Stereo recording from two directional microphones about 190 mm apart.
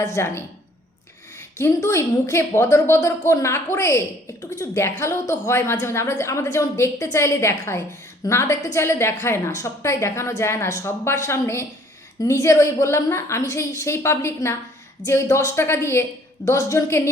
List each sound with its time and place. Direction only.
0.0 s a woman's voice: 15° left (ahead or behind)